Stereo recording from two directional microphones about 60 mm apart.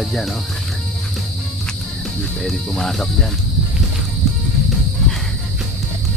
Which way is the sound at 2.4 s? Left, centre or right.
Centre.